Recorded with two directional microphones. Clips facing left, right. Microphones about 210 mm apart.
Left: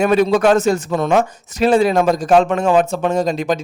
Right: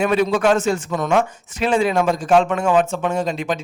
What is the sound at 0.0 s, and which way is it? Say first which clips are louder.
A man's voice: left 4 dB; 40° left (ahead or behind).